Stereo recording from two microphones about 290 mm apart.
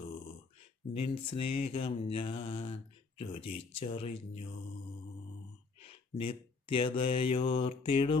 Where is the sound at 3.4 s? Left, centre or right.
Left.